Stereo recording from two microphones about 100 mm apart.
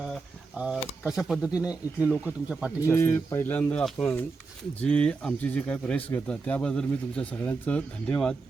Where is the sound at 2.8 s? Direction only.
25° left (ahead or behind).